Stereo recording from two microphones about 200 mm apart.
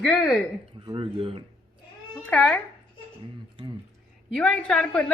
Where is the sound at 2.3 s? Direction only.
5° left (ahead or behind).